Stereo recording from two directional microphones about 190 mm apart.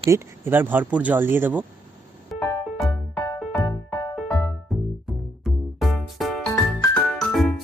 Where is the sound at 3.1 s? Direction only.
20° left (ahead or behind).